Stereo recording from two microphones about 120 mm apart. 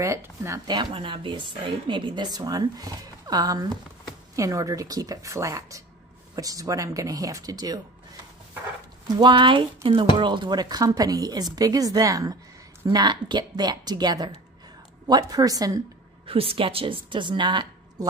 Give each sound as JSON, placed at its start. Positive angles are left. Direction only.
{"t": 0.0, "sound": "speech", "side_deg": -25}
{"t": 9.0, "sound": "a woman's voice", "side_deg": -40}
{"t": 12.8, "sound": "speech", "side_deg": -40}
{"t": 16.3, "sound": "a woman's voice", "side_deg": -50}